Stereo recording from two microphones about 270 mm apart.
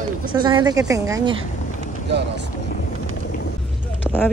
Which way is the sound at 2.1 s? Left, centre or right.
Right.